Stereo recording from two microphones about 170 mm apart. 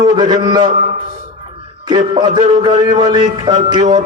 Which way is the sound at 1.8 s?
25° right (ahead or behind).